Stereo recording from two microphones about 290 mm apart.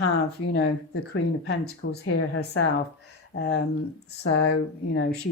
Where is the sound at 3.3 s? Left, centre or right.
Left.